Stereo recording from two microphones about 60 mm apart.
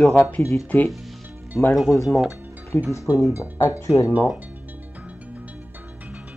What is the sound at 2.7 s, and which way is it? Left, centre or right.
Speech, left.